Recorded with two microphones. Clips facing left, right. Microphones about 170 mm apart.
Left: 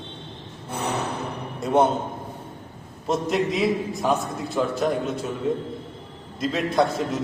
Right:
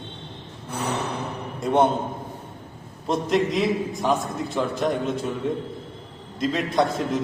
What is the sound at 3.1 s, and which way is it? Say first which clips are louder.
A man's voice: right 1 dB; centre (ahead or behind).